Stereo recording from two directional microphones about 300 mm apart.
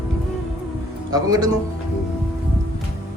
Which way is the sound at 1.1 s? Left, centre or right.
Centre.